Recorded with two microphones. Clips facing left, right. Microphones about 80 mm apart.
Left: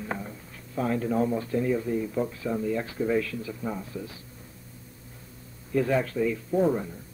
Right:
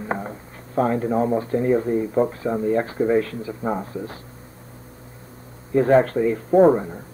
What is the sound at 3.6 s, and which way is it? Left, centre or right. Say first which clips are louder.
Speech: right 10 dB; right.